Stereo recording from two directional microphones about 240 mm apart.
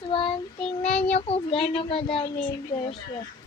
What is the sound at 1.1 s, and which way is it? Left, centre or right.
Speech, left.